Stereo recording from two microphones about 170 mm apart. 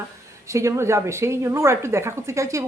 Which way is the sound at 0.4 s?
15° right (ahead or behind).